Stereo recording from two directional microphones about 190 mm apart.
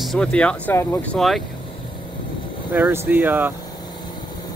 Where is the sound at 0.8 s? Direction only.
15° left (ahead or behind).